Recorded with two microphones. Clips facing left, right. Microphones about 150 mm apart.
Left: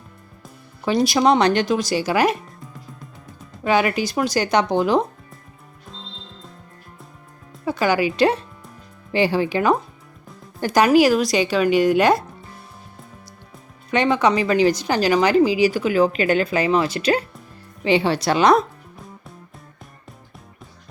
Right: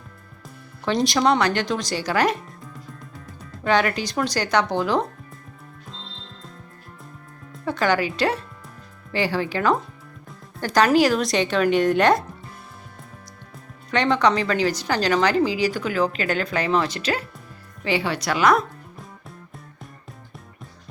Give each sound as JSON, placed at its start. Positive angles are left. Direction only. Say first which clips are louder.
{"t": 0.9, "sound": "a woman's voice", "louder": "left 3 dB", "side_deg": 10}
{"t": 1.2, "sound": "a woman's voice", "louder": "left 4 dB", "side_deg": 20}
{"t": 1.6, "sound": "a woman's voice", "louder": "left 5 dB", "side_deg": 10}
{"t": 3.6, "sound": "a woman's voice", "louder": "left 2 dB", "side_deg": 10}
{"t": 7.6, "sound": "a woman's voice", "louder": "left 2 dB", "side_deg": 5}
{"t": 13.9, "sound": "a woman's voice", "louder": "left 2 dB", "side_deg": 10}
{"t": 17.8, "sound": "a woman's voice", "louder": "left 5 dB", "side_deg": 25}